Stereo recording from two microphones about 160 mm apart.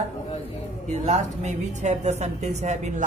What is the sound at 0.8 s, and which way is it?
A woman's voice, 45° right (ahead or behind).